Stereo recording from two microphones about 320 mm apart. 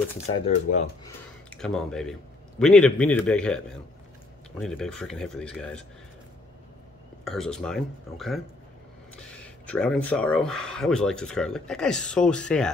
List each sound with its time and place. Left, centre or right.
0.7 s speech: left
1.0 s speech: centre
7.2 s speech: centre